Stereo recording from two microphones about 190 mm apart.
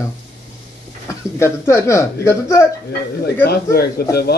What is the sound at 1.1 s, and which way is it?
Speech, 15° left (ahead or behind).